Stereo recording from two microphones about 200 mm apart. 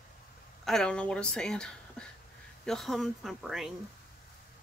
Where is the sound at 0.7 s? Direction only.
5° left (ahead or behind).